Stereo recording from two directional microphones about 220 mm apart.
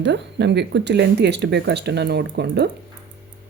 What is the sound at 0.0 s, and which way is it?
Speech, 55° right (ahead or behind).